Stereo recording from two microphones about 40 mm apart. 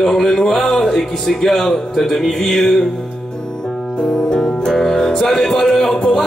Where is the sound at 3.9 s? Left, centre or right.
Centre.